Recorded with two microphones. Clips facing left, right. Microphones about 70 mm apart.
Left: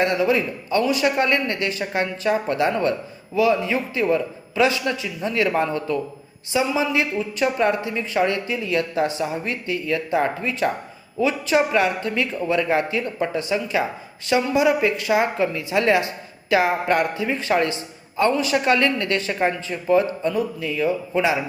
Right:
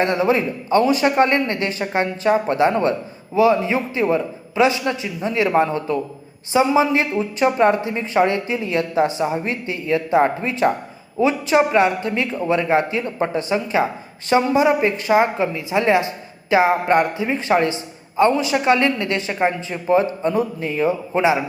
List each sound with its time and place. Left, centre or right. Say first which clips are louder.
0.0 s speech: right 2 dB; right